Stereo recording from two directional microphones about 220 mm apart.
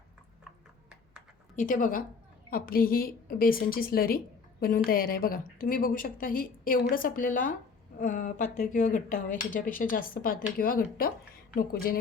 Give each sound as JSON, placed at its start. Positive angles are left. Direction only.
{"t": 1.5, "sound": "a woman's voice", "side_deg": 35}